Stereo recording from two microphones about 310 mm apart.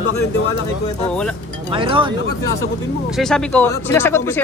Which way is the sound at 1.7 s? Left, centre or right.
Centre.